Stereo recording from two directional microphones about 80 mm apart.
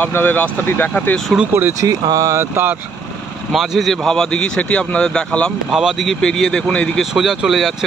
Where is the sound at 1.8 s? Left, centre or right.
Right.